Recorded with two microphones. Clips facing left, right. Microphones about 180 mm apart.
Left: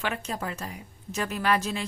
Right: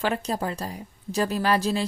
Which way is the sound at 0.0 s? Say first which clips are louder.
Right 5 dB; 35° right (ahead or behind).